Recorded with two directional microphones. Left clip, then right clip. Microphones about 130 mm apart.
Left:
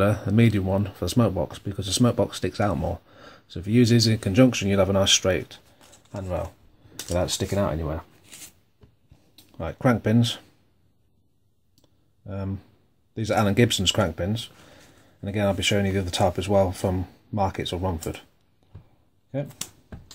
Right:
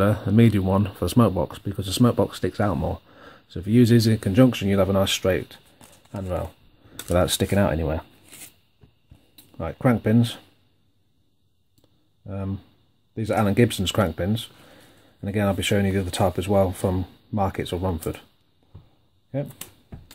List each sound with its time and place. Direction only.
0.0 s speech: 25° right (ahead or behind)
0.7 s speech: 40° right (ahead or behind); by 5.6 s 20° right (ahead or behind)
7.0 s a sound: 45° right (ahead or behind)
7.2 s speech: 65° right (ahead or behind); by 8.0 s 90° right
9.6 s speech: 25° right (ahead or behind)
12.3 s speech: 15° right (ahead or behind)
13.9 s speech: 30° right (ahead or behind)